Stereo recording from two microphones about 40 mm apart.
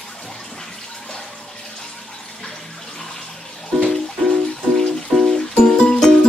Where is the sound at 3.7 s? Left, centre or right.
Centre.